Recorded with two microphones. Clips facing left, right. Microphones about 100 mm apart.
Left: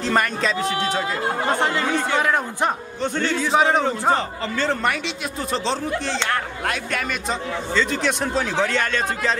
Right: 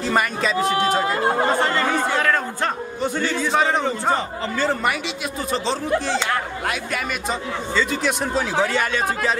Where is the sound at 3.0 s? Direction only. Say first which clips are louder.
Even; 5° right (ahead or behind).